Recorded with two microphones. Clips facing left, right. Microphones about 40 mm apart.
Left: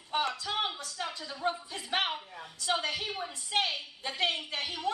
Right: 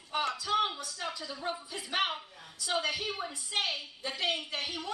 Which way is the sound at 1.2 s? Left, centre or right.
Centre.